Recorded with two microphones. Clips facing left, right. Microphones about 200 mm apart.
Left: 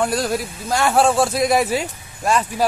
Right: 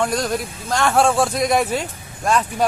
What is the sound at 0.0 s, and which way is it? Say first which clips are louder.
A man's voice: left 1 dB; 5° left (ahead or behind).